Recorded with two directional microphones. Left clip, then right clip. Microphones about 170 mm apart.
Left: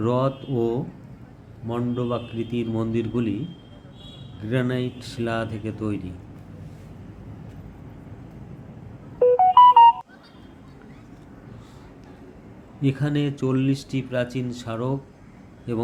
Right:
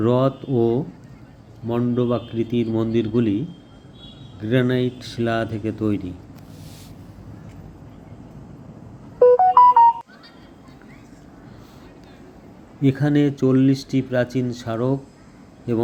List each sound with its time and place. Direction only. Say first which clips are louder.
0.0 s speech: right 4 dB; 20° right (ahead or behind)
4.4 s speech: right 6 dB; 20° right (ahead or behind)
9.1 s music: right 2 dB; centre (ahead or behind)
12.8 s speech: right 6 dB; 25° right (ahead or behind)